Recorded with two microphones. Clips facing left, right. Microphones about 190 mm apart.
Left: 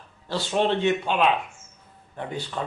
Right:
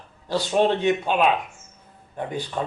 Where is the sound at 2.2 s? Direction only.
15° right (ahead or behind).